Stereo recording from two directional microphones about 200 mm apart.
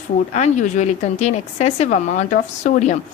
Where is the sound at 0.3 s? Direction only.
35° left (ahead or behind).